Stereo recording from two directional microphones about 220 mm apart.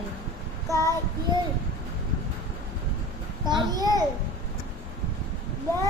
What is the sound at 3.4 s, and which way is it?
Speech, 20° right (ahead or behind).